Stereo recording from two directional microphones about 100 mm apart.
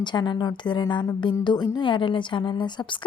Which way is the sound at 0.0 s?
50° left (ahead or behind).